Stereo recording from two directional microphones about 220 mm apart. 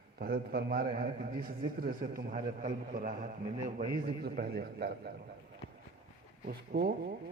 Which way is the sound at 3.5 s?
15° right (ahead or behind).